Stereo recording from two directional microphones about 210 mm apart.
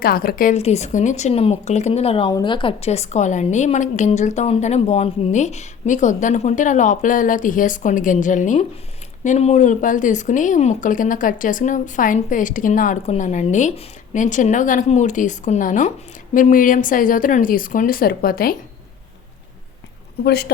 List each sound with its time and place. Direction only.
0.0 s speech: 45° left (ahead or behind)
20.2 s speech: 50° left (ahead or behind)